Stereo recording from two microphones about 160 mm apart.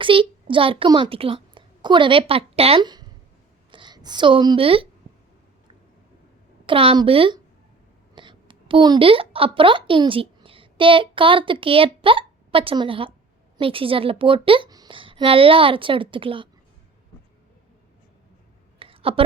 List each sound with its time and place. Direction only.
0.0 s a child's voice: 30° right (ahead or behind)
6.7 s a woman's voice: 35° right (ahead or behind)
18.8 s a sound: 35° right (ahead or behind)